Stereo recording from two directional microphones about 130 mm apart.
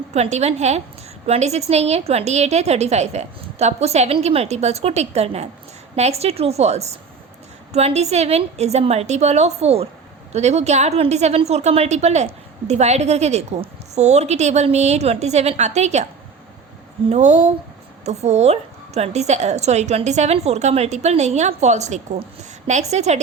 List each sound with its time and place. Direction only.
0.1 s a woman's voice: 60° right (ahead or behind)
17.1 s a woman's voice: 65° right (ahead or behind)